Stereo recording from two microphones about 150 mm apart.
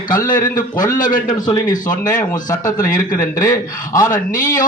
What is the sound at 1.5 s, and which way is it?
A man's voice, 25° left (ahead or behind).